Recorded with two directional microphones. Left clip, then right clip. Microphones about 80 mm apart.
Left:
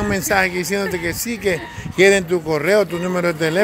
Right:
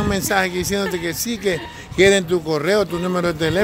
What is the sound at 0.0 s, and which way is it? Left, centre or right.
Speech, right.